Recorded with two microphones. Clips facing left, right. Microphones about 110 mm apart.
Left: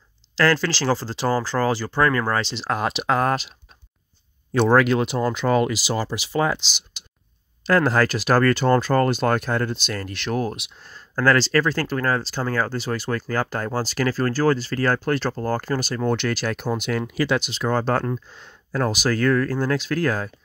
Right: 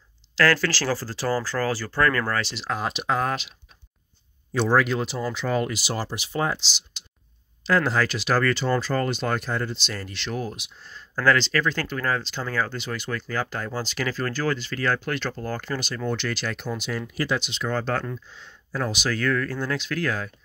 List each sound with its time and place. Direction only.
0.4 s speech: 25° left (ahead or behind)
2.7 s speech: 75° left (ahead or behind)
3.3 s speech: 35° left (ahead or behind)
4.5 s speech: 55° left (ahead or behind); by 6.6 s 90° left
7.6 s speech: 50° left (ahead or behind)
17.1 s speech: 90° left
17.5 s speech: 40° left (ahead or behind)